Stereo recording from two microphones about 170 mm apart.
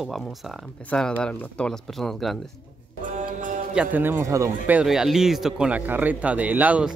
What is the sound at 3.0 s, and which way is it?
Music, 50° right (ahead or behind).